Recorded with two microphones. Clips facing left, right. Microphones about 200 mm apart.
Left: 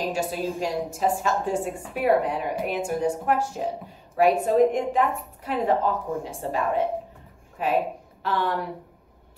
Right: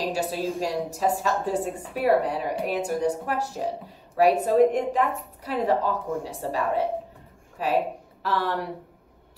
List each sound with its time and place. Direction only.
0.1 s a woman's voice: 35° right (ahead or behind)